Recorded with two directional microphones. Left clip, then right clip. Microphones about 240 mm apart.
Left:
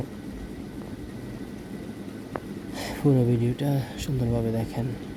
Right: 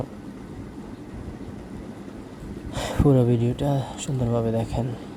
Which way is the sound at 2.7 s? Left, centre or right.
Centre.